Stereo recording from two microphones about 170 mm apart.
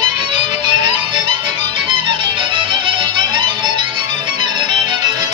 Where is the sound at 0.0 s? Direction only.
30° right (ahead or behind).